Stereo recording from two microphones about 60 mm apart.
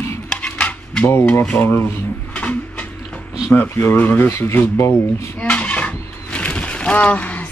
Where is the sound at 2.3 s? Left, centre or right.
Left.